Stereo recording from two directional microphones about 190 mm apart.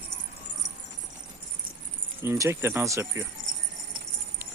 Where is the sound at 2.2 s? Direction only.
15° right (ahead or behind).